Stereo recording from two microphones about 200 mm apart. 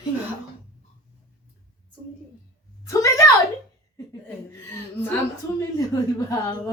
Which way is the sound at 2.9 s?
15° left (ahead or behind).